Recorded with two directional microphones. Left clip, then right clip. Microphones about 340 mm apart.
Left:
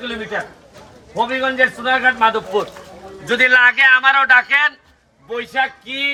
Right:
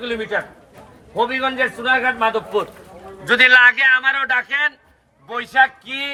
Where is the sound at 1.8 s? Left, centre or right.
Centre.